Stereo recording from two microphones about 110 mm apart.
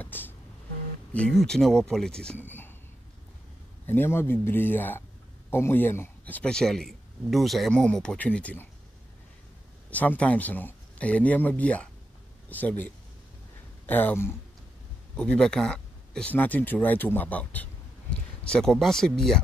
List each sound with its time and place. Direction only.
0.0 s music: 15° left (ahead or behind)
1.1 s speech: 5° left (ahead or behind)
3.8 s speech: 20° left (ahead or behind)
9.8 s speech: 15° left (ahead or behind)
15.1 s speech: 10° left (ahead or behind)